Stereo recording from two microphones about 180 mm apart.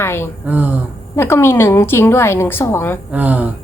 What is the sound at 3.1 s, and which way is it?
Speech, 10° right (ahead or behind).